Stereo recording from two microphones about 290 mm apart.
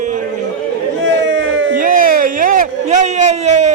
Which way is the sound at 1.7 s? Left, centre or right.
Right.